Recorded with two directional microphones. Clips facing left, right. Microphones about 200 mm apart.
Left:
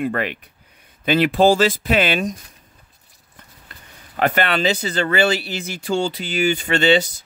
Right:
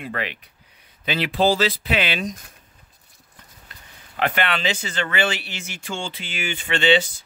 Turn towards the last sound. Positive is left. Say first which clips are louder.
# left 3 dB
turn(degrees=40)  # may be behind; listen again after turning